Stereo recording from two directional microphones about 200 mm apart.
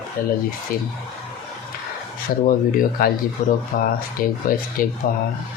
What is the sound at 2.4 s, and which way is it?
Speech, 45° left (ahead or behind).